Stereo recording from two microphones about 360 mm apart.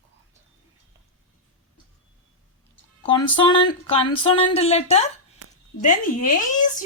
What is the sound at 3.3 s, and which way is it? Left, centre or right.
Speech, centre.